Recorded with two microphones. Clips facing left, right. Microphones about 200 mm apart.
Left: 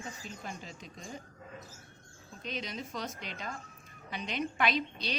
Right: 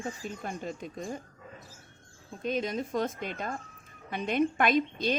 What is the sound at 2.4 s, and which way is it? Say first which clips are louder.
A woman's voice: right 9 dB; 50° right (ahead or behind).